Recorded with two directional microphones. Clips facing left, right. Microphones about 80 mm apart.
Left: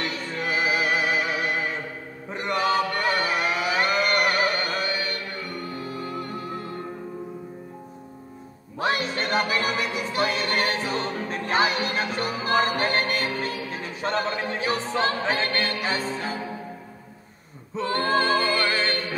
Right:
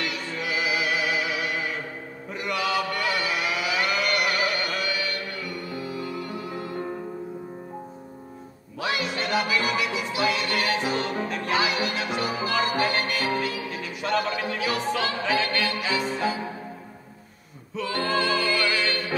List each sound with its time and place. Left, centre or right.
0.0 s music: left
2.3 s a sound: left
8.7 s music: left
17.7 s music: left